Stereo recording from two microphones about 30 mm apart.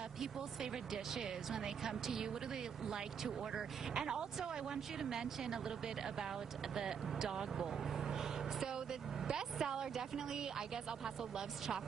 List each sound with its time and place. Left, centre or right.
0.2 s speech: centre
6.7 s speech: centre